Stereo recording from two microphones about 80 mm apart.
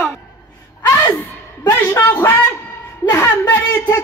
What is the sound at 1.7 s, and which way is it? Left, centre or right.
Speech, left.